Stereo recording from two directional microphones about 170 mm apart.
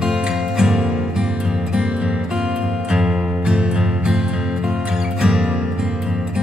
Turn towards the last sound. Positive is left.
turn(degrees=-5)  # may be behind; listen again after turning